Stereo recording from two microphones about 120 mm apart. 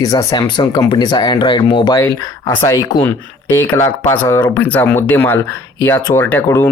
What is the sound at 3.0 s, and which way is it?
Speech, 15° left (ahead or behind).